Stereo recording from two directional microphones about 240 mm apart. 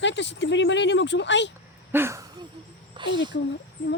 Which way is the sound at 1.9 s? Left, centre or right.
Centre.